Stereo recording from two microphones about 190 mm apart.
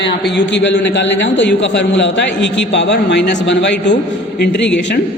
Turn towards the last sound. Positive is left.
turn(degrees=70)  # may be behind; listen again after turning